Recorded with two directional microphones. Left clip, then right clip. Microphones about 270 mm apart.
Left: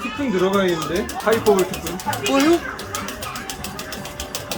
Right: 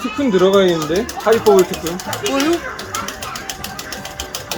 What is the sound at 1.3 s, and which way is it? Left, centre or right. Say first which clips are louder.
Speech: right 5 dB; right.